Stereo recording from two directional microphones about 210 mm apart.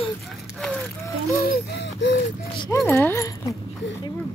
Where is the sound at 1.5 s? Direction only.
55° left (ahead or behind).